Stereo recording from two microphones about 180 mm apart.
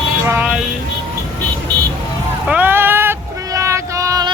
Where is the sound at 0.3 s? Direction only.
10° right (ahead or behind).